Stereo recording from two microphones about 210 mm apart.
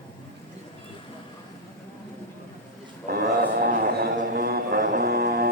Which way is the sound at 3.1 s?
45° right (ahead or behind).